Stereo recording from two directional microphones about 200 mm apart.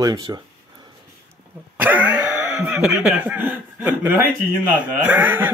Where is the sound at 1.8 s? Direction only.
10° right (ahead or behind).